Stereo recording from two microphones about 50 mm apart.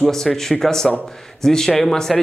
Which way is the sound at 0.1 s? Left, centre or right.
Centre.